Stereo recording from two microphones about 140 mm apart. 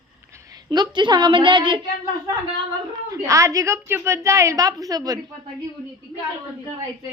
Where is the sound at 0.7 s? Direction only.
30° right (ahead or behind).